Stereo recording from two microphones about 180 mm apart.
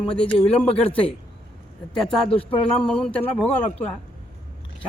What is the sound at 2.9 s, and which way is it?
Speech, 5° left (ahead or behind).